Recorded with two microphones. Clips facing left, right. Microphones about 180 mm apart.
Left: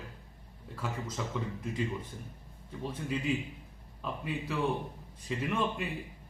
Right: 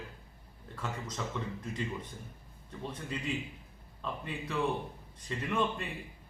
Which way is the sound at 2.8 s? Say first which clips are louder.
Left 4 dB; 5° left (ahead or behind).